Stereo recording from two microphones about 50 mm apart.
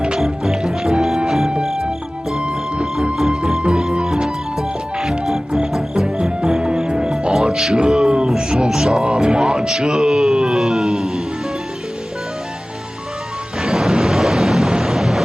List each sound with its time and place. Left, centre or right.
0.2 s music: centre
2.3 s music: centre
3.6 s music: centre
13.6 s a sound: centre